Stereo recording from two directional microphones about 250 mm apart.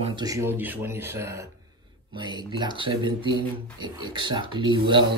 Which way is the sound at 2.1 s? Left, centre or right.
Centre.